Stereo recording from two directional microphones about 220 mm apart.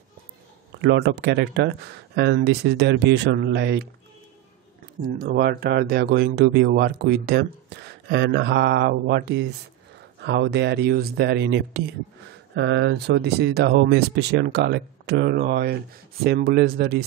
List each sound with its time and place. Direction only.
0.7 s speech: 50° right (ahead or behind)
5.0 s speech: 45° right (ahead or behind)